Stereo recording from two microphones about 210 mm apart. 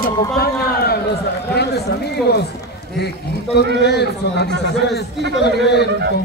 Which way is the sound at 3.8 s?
50° left (ahead or behind).